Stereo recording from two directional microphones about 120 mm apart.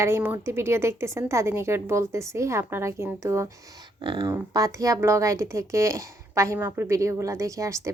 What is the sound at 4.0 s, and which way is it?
Speech, 45° right (ahead or behind).